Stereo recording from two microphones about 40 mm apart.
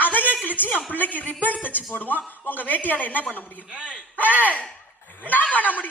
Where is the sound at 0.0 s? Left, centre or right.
Left.